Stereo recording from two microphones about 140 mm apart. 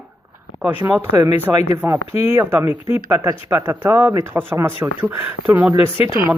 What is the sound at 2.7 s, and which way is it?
Speech, 45° left (ahead or behind).